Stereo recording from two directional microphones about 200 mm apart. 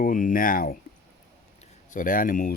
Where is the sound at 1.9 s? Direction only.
45° left (ahead or behind).